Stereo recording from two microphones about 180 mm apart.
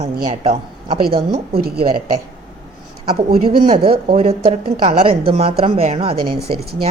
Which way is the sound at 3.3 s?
55° right (ahead or behind).